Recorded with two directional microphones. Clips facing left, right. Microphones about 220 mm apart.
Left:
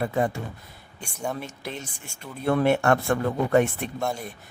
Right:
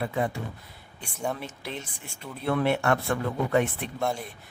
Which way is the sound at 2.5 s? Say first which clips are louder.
Left 4 dB; 45° left (ahead or behind).